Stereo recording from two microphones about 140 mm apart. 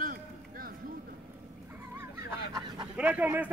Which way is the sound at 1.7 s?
15° right (ahead or behind).